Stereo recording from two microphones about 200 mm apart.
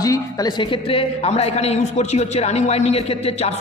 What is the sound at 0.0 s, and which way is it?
A woman's voice, 20° left (ahead or behind).